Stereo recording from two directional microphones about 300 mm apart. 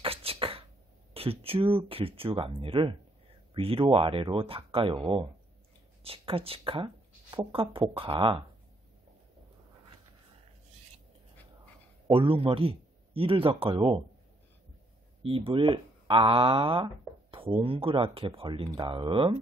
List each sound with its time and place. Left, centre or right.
0.0 s a sound: centre
1.1 s speech: centre
6.0 s speech: centre
12.1 s speech: centre
15.2 s speech: centre